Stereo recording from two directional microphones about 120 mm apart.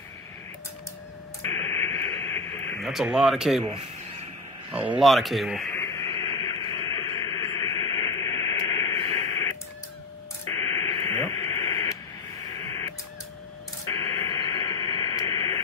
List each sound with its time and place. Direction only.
1.4 s radio: 25° left (ahead or behind)
2.8 s speech: centre (ahead or behind)
4.7 s speech: 10° right (ahead or behind)
5.0 s speech: centre (ahead or behind)
5.7 s radio: 25° left (ahead or behind)
6.1 s radio: 40° left (ahead or behind)